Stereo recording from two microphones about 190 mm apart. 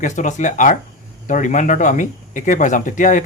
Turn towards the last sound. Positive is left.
turn(degrees=45)  # may be behind; listen again after turning